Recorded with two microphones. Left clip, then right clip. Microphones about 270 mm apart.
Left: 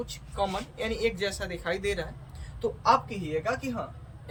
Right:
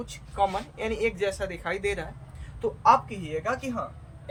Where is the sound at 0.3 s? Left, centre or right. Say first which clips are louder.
Right 4 dB; centre.